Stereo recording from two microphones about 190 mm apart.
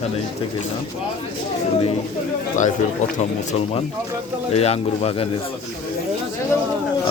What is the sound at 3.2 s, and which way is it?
Speech, 35° left (ahead or behind).